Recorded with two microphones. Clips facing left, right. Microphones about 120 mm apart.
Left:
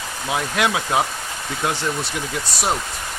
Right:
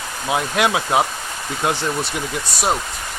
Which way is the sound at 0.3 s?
15° right (ahead or behind).